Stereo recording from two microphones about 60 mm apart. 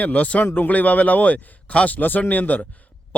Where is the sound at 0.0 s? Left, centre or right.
Left.